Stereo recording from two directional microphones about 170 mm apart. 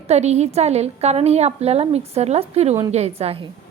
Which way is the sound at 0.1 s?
40° right (ahead or behind).